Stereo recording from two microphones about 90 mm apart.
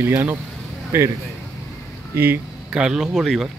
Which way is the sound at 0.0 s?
25° right (ahead or behind).